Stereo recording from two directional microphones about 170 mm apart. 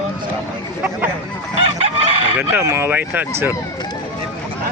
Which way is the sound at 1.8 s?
40° right (ahead or behind).